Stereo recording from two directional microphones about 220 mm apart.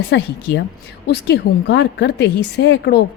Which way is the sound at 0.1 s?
55° left (ahead or behind).